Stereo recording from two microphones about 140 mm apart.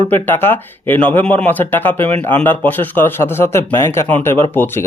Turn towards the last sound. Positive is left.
turn(degrees=15)  # may be behind; listen again after turning